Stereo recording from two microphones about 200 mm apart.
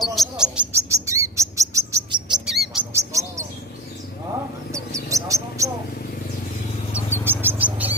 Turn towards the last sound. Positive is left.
turn(degrees=-5)  # may be behind; listen again after turning